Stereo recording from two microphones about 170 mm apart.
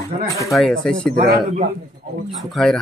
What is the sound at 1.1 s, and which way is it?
Speech, 65° right (ahead or behind).